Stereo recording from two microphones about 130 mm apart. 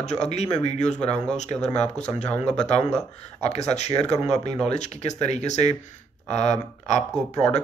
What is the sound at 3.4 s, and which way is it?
Speech, 60° left (ahead or behind).